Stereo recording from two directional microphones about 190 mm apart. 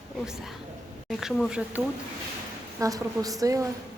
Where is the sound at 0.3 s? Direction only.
Centre (ahead or behind).